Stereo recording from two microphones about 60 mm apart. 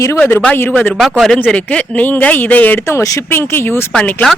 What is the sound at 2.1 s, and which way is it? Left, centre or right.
Speech, left.